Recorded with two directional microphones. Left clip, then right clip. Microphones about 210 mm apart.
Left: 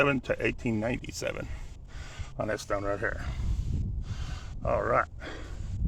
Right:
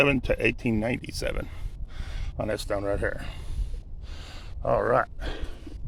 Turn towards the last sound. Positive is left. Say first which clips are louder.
# right 3 dB
turn(degrees=-30)  # may be behind; listen again after turning